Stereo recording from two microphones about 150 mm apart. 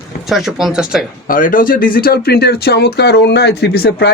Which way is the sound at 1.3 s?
65° left (ahead or behind).